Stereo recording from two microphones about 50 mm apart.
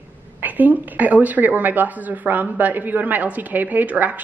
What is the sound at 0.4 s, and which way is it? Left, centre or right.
A woman's voice, right.